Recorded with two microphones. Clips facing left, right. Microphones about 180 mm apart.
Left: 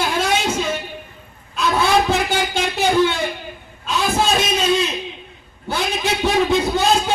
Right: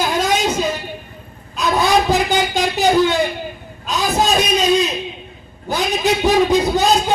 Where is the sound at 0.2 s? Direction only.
40° right (ahead or behind).